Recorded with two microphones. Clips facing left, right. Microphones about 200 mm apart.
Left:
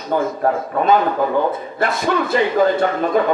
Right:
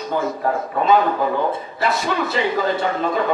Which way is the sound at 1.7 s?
50° left (ahead or behind).